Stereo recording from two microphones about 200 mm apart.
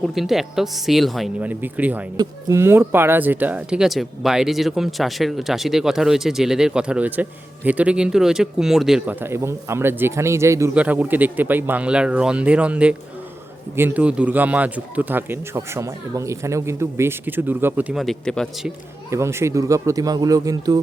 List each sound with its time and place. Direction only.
0.0 s a man's voice: centre (ahead or behind)
19.1 s a man's voice: 15° right (ahead or behind)